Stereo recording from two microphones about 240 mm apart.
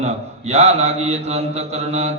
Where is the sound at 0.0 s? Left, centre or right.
Right.